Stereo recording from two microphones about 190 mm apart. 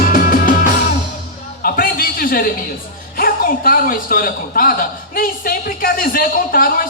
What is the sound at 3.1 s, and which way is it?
A man's voice, 50° left (ahead or behind).